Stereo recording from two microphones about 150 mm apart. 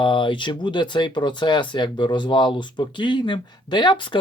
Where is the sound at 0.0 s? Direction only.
35° left (ahead or behind).